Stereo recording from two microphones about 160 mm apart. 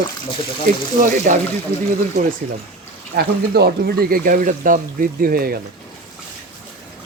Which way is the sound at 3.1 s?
85° right.